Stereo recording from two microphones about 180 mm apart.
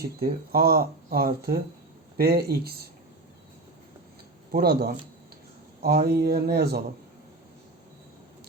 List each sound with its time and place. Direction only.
0.2 s speech: 60° right (ahead or behind)
4.5 s speech: 60° right (ahead or behind)